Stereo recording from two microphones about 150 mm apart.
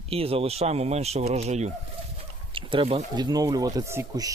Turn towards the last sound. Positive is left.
turn(degrees=-20)  # may be behind; listen again after turning